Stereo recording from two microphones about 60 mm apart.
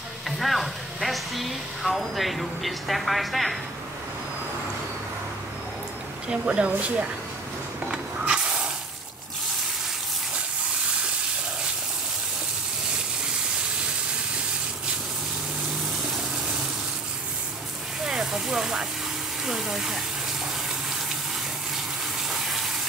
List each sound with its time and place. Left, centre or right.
0.4 s speech: centre
6.2 s speech: centre
7.9 s spray: centre
18.0 s a sound: centre
19.4 s speech: centre